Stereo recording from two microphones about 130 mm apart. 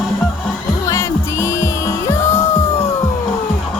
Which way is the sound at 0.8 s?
25° left (ahead or behind).